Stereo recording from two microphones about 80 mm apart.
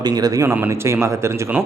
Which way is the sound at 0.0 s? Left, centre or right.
Right.